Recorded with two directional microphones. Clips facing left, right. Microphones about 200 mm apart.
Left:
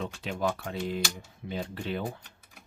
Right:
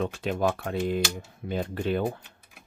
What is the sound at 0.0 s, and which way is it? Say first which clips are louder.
Speech: right 5 dB; 50° right (ahead or behind).